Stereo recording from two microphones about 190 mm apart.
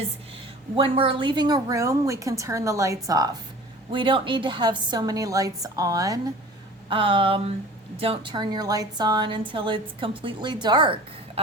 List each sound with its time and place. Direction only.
0.8 s a woman's voice: 30° right (ahead or behind)